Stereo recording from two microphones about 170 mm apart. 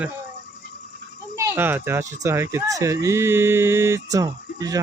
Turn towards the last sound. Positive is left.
turn(degrees=-20)  # may be behind; listen again after turning